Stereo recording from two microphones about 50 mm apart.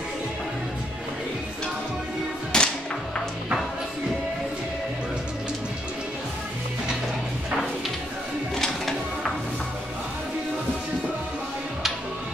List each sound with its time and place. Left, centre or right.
2.5 s music: centre
8.5 s music: centre